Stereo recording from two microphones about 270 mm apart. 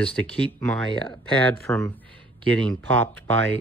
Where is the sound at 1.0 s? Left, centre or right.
Centre.